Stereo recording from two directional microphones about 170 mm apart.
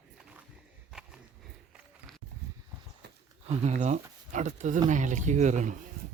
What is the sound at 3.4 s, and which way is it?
Speech, 40° right (ahead or behind).